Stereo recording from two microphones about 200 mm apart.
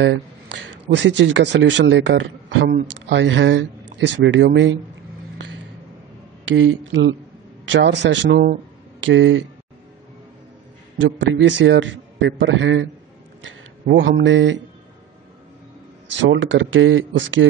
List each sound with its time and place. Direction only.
0.8 s a man's voice: 60° right (ahead or behind)
6.4 s a man's voice: 75° right (ahead or behind); by 8.5 s 55° right (ahead or behind)
9.0 s speech: 70° right (ahead or behind)
11.0 s a man's voice: 65° right (ahead or behind)
13.9 s speech: 65° right (ahead or behind)
16.2 s speech: 70° right (ahead or behind)